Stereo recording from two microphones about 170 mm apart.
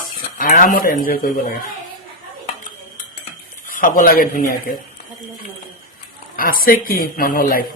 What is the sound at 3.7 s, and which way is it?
Speech, 50° left (ahead or behind).